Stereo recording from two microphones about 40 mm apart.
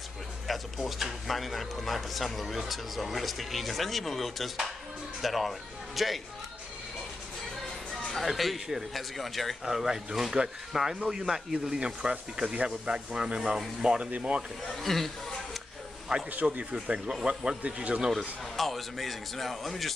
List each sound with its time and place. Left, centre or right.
0.5 s speech: centre
7.9 s speech: centre
9.7 s speech: centre; by 14.4 s right
14.8 s speech: centre
16.1 s speech: centre
16.7 s speech: right
18.6 s speech: centre